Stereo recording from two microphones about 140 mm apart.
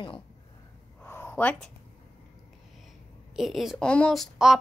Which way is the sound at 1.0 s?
15° left (ahead or behind).